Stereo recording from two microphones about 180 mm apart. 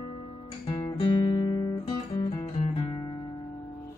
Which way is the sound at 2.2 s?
20° left (ahead or behind).